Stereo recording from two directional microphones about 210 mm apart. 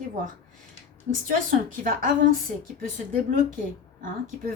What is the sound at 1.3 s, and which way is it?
Speech, 40° right (ahead or behind).